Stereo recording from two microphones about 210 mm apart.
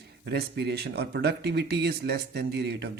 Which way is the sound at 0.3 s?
50° right (ahead or behind).